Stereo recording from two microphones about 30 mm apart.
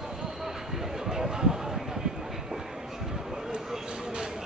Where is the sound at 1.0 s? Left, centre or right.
Centre.